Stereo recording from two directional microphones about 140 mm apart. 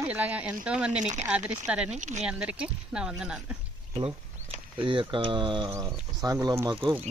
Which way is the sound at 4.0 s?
40° right (ahead or behind).